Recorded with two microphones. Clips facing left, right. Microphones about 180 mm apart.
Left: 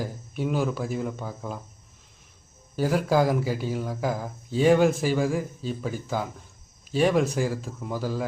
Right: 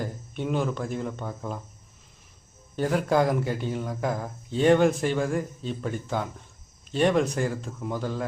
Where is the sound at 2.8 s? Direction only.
5° left (ahead or behind).